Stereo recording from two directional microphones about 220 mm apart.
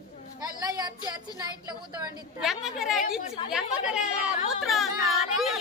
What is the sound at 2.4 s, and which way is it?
Speech, centre (ahead or behind).